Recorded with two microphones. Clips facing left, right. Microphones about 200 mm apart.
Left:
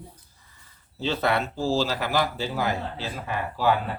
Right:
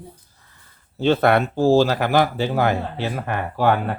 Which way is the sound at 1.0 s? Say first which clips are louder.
Right 8 dB; 55° right (ahead or behind).